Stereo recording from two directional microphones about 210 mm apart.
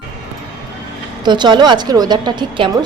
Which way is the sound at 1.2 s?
20° right (ahead or behind).